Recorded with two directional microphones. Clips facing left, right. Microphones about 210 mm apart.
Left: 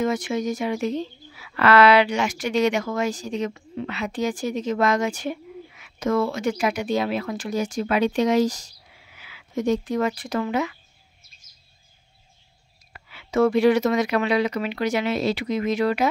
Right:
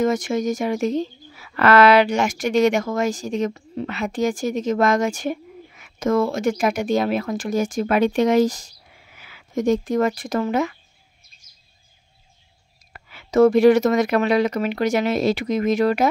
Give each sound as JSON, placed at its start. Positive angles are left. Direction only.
{"t": 0.0, "sound": "a woman's voice", "side_deg": -45}
{"t": 12.9, "sound": "a woman's voice", "side_deg": -45}